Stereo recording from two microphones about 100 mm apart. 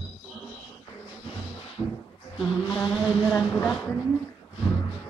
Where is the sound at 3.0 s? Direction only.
5° left (ahead or behind).